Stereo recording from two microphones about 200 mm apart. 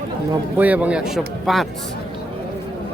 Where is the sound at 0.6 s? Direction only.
10° right (ahead or behind).